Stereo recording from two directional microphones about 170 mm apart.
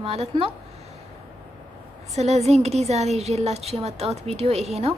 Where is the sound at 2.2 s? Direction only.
40° right (ahead or behind).